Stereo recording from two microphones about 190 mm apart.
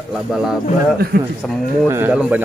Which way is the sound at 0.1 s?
Centre (ahead or behind).